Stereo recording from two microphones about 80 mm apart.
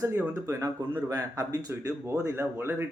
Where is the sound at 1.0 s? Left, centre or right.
Right.